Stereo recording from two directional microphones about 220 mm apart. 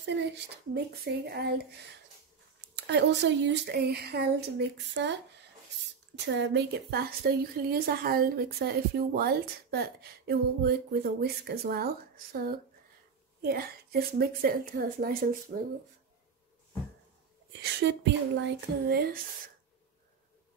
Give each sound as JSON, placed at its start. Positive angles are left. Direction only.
{"t": 0.7, "sound": "a woman's voice", "side_deg": -45}
{"t": 2.7, "sound": "a woman's voice", "side_deg": -50}
{"t": 17.5, "sound": "a woman's voice", "side_deg": -50}